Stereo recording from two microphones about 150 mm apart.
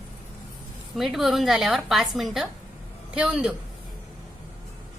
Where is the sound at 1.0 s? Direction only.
Centre (ahead or behind).